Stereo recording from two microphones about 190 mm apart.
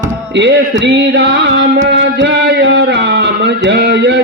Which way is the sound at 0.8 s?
65° right (ahead or behind).